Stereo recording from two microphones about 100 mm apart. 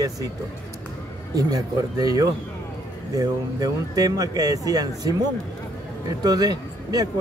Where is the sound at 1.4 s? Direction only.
40° right (ahead or behind).